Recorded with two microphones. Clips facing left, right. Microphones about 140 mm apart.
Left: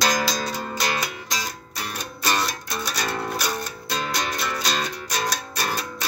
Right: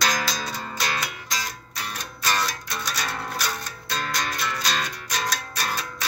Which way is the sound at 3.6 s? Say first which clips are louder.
Left 3 dB; 5° left (ahead or behind).